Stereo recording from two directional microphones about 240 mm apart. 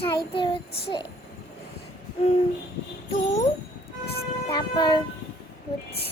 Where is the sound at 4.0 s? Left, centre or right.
Left.